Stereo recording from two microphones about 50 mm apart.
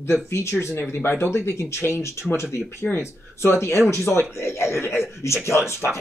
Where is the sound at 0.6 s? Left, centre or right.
Left.